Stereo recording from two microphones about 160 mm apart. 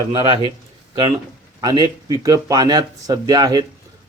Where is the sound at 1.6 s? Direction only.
25° right (ahead or behind).